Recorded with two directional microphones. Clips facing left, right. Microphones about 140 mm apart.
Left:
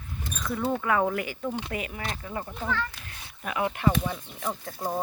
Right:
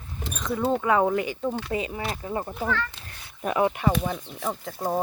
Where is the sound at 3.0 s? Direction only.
25° right (ahead or behind).